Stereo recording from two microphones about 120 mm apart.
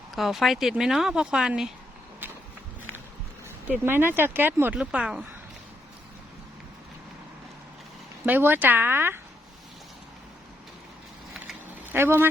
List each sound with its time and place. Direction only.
0.1 s speech: centre (ahead or behind)
2.2 s walk: 15° right (ahead or behind)
3.7 s speech: 20° right (ahead or behind)
8.3 s speech: 15° right (ahead or behind)
11.9 s speech: 20° right (ahead or behind)